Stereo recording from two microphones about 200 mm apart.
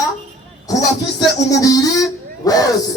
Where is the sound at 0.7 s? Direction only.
15° left (ahead or behind).